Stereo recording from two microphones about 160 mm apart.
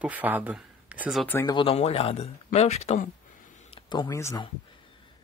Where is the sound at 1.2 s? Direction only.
15° left (ahead or behind).